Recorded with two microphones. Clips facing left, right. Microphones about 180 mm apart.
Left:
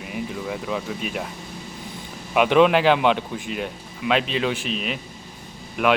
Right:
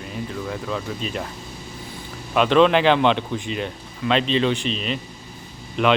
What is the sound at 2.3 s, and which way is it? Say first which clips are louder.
Speech: even; 10° left (ahead or behind).